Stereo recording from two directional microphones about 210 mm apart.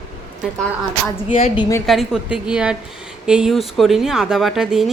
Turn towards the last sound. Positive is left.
turn(degrees=0)  # may be behind; listen again after turning